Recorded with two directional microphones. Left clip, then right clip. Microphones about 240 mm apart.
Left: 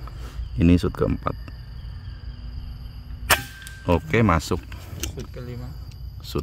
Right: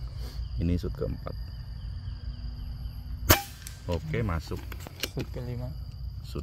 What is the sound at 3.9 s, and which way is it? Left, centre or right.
Speech, left.